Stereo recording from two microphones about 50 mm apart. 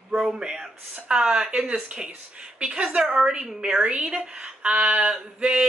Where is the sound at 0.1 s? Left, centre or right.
Centre.